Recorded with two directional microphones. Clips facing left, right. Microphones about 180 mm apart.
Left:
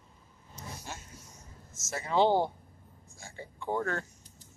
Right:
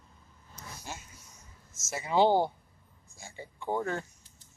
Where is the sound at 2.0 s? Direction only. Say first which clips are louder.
Right 1 dB; 10° right (ahead or behind).